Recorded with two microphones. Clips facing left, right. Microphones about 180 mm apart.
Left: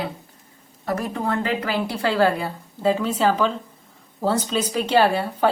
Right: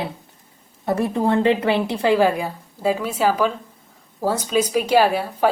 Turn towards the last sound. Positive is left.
turn(degrees=-10)  # may be behind; listen again after turning